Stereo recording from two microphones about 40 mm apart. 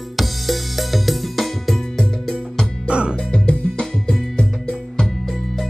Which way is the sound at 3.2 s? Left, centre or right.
Centre.